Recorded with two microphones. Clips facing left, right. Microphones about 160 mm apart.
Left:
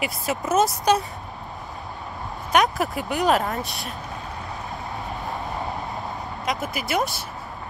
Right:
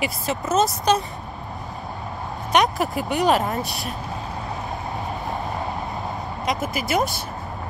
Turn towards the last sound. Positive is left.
turn(degrees=0)  # may be behind; listen again after turning